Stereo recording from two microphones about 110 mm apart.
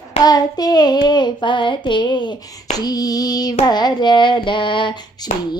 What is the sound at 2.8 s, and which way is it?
Child singing, 35° left (ahead or behind).